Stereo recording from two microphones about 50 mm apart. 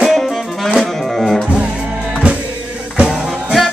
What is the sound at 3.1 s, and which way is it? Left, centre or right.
Music, centre.